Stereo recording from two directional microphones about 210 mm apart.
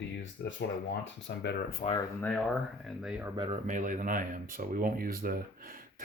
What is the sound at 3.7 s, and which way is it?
Speech, 35° right (ahead or behind).